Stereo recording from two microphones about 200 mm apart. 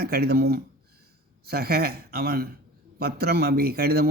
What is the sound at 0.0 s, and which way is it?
A man's voice, 50° right (ahead or behind).